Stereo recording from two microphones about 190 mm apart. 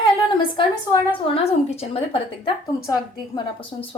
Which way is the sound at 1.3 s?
30° left (ahead or behind).